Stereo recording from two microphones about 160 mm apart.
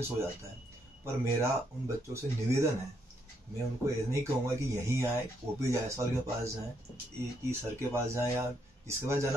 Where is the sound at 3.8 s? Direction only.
15° right (ahead or behind).